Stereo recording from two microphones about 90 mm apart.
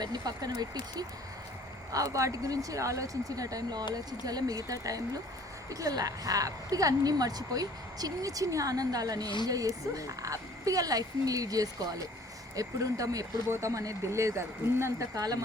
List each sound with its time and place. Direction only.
0.0 s a woman's voice: 50° right (ahead or behind)